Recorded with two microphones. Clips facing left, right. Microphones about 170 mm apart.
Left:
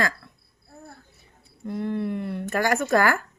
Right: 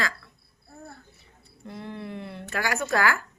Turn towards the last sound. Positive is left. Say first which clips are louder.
# left 4 dB
turn(degrees=50)  # may be behind; listen again after turning